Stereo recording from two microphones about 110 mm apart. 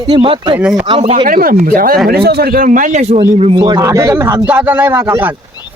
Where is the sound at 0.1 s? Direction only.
50° right (ahead or behind).